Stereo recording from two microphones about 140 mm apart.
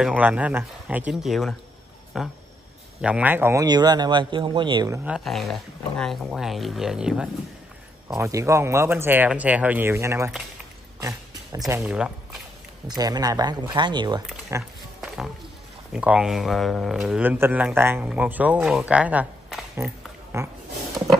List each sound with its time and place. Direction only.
0.0 s speech: 10° right (ahead or behind)
3.6 s speech: 30° right (ahead or behind)
5.0 s speech: centre (ahead or behind)
8.2 s speech: 20° right (ahead or behind)
11.0 s a sound: 25° right (ahead or behind)
11.8 s speech: 5° right (ahead or behind)
12.8 s speech: 30° right (ahead or behind)
14.5 s speech: 20° right (ahead or behind)
15.0 s music: 5° right (ahead or behind)
15.9 s speech: 10° right (ahead or behind)
21.0 s a sound: 5° right (ahead or behind)